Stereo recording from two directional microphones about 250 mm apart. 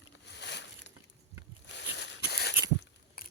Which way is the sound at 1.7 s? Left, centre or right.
Left.